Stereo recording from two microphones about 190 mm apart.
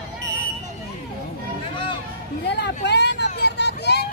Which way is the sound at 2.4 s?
65° left (ahead or behind).